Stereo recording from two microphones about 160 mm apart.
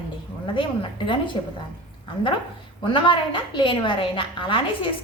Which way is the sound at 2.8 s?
30° left (ahead or behind).